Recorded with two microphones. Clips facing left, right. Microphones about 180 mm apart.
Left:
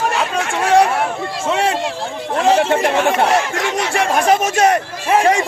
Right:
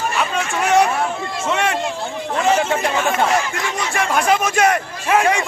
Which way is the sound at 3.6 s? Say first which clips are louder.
Left 4 dB; 75° left (ahead or behind).